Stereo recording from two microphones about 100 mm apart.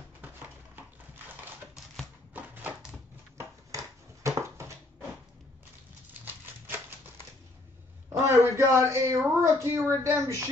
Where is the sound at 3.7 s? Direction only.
30° right (ahead or behind).